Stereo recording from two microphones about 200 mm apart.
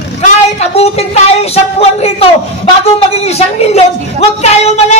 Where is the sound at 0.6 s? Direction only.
30° left (ahead or behind).